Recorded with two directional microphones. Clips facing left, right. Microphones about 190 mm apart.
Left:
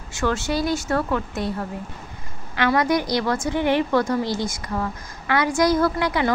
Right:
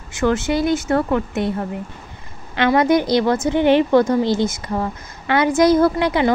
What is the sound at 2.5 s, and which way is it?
Speech, 25° right (ahead or behind).